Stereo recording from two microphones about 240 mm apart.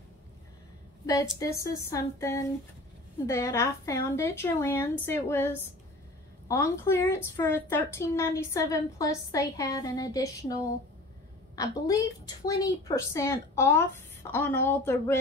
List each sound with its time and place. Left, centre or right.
1.4 s a woman's voice: centre